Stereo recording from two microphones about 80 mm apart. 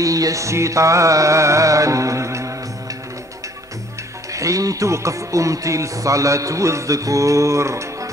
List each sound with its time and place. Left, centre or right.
0.0 s speech: right
4.3 s speech: right